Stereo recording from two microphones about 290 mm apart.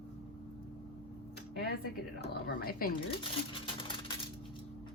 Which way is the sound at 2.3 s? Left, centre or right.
Left.